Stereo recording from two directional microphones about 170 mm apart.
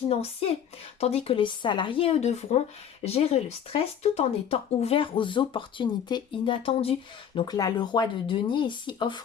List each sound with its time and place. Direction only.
0.1 s speech: 35° left (ahead or behind)
7.3 s speech: 20° left (ahead or behind)